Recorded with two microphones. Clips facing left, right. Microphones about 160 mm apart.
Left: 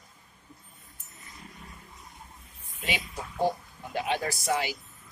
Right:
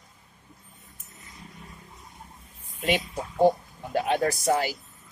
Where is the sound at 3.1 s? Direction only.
40° right (ahead or behind).